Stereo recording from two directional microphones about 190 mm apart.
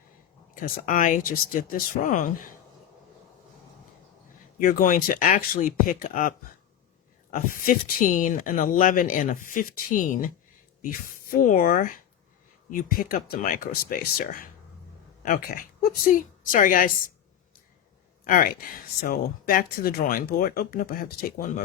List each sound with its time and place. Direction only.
0.5 s speech: 45° left (ahead or behind)
4.6 s a woman's voice: 45° left (ahead or behind)
18.3 s speech: 45° left (ahead or behind)